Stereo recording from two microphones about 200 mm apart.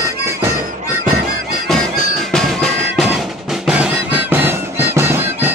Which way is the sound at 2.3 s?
Centre (ahead or behind).